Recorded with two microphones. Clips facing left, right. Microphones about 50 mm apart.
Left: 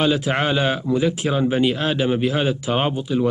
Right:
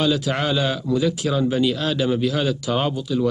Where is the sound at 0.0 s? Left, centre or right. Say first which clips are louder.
Left 2 dB; left.